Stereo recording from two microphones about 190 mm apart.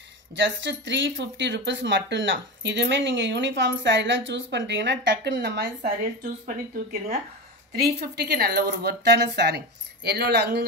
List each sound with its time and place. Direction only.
0.3 s speech: 70° right (ahead or behind)
5.8 s speech: 50° right (ahead or behind)
8.0 s a woman's voice: 60° right (ahead or behind)